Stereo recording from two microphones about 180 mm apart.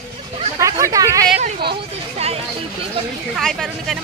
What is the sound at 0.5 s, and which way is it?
Speech, 15° right (ahead or behind).